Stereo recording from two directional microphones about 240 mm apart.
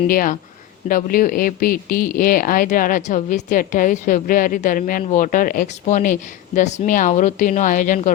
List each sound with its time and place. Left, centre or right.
0.1 s speech: left